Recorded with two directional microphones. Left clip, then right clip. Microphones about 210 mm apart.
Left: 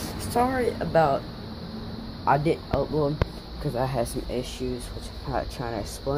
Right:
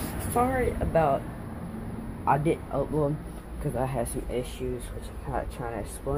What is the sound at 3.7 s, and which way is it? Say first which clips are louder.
Speech: left 3 dB; 15° left (ahead or behind).